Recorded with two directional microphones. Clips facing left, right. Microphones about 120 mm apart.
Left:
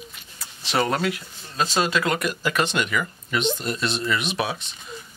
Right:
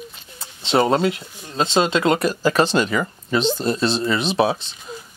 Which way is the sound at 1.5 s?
25° right (ahead or behind).